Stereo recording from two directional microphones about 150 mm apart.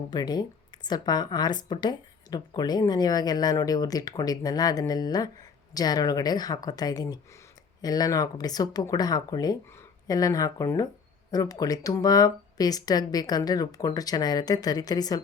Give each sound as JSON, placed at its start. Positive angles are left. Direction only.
{"t": 0.1, "sound": "a woman's voice", "side_deg": 25}